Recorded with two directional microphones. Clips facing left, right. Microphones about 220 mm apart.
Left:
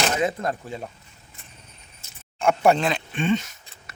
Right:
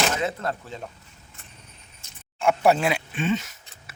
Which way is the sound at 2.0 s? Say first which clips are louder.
Left 1 dB; centre (ahead or behind).